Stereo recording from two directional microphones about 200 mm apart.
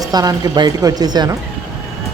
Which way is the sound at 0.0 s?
20° right (ahead or behind).